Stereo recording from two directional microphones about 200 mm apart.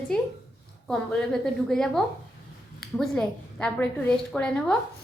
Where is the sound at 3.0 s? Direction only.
5° left (ahead or behind).